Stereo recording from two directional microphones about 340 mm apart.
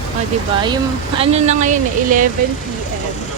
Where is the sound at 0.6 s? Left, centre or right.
Centre.